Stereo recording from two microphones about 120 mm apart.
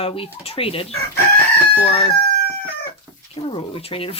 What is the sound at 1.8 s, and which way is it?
Crowing, 55° left (ahead or behind).